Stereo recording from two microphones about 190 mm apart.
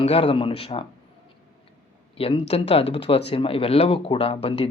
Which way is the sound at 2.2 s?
30° left (ahead or behind).